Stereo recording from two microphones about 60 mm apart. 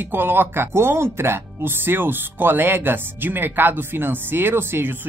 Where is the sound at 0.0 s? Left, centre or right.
Right.